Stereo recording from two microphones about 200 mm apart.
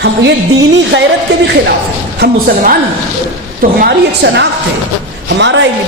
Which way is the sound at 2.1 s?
55° right (ahead or behind).